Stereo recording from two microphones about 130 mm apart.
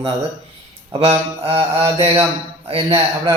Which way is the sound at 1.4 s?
45° right (ahead or behind).